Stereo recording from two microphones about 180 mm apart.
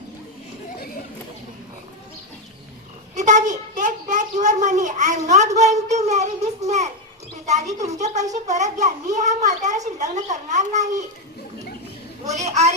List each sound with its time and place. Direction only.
3.2 s a sound: 45° right (ahead or behind)
7.9 s a child's voice: 40° right (ahead or behind)
12.3 s a woman's voice: 40° right (ahead or behind)